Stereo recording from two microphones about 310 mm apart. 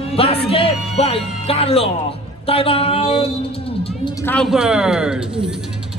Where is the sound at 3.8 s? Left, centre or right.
Centre.